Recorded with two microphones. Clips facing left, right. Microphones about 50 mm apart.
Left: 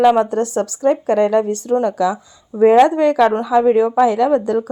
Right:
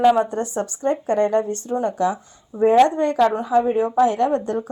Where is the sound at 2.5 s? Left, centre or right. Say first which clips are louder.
Left 4 dB; left.